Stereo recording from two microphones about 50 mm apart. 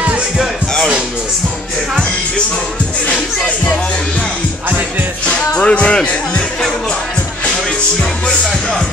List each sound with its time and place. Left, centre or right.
3.1 s music: left
5.5 s music: left